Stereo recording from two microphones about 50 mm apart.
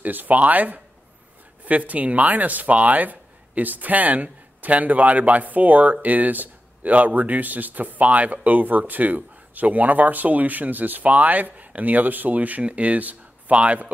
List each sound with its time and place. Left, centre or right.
0.0 s speech: right